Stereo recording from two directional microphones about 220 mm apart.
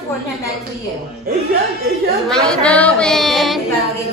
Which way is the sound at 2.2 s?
5° left (ahead or behind).